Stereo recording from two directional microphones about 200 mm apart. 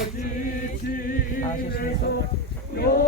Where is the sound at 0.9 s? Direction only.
45° left (ahead or behind).